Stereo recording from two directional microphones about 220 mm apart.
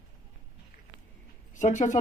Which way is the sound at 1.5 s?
35° left (ahead or behind).